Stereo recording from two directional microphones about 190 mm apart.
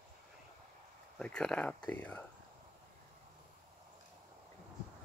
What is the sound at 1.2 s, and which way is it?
Speech, 5° left (ahead or behind).